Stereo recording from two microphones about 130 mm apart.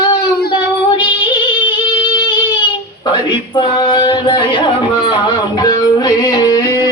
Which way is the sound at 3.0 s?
35° left (ahead or behind).